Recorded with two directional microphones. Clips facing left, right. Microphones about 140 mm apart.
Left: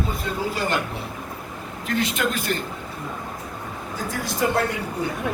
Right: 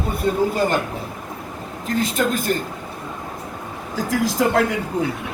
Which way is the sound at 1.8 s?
45° right (ahead or behind).